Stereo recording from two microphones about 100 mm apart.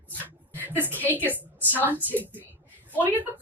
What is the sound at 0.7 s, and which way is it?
Speech, 20° right (ahead or behind).